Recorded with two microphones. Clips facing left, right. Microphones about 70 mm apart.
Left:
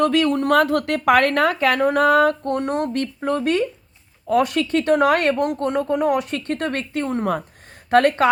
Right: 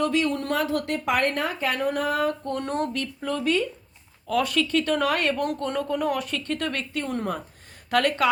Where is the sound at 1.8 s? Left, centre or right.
Left.